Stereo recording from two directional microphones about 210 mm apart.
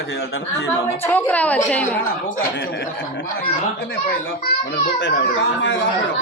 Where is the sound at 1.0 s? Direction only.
10° left (ahead or behind).